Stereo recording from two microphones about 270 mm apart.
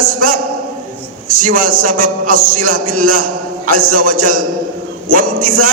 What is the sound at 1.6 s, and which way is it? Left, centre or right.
A man's voice, right.